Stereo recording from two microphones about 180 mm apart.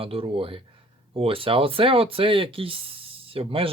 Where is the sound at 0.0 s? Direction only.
30° right (ahead or behind).